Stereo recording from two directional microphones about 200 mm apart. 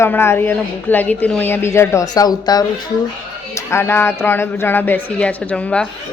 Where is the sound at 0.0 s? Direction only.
10° left (ahead or behind).